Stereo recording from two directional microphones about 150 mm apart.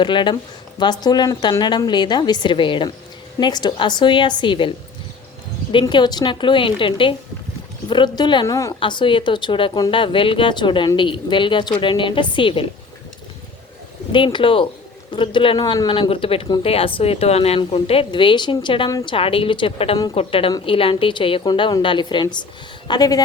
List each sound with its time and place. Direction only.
0.0 s a woman's voice: 30° left (ahead or behind)
5.8 s a woman's voice: 30° left (ahead or behind)
8.8 s speech: 30° left (ahead or behind)
14.1 s speech: 30° left (ahead or behind)
18.9 s a woman's voice: 25° left (ahead or behind)
19.1 s a woman's voice: 40° left (ahead or behind)